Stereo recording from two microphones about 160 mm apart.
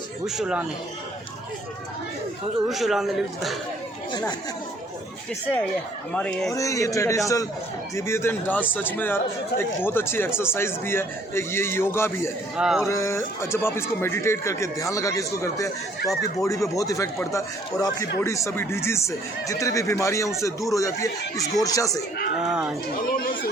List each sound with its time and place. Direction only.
0.3 s speech: 5° right (ahead or behind)
2.6 s speech: centre (ahead or behind)
6.1 s speech: 5° left (ahead or behind)
6.5 s speech: 20° left (ahead or behind)
12.5 s speech: 5° right (ahead or behind)
12.8 s speech: 20° left (ahead or behind)
22.4 s speech: 5° right (ahead or behind)